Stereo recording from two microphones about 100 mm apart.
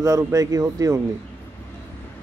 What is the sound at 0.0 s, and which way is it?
Speech, 30° right (ahead or behind).